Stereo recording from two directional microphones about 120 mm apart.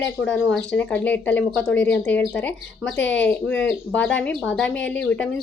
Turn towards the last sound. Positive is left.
turn(degrees=10)  # may be behind; listen again after turning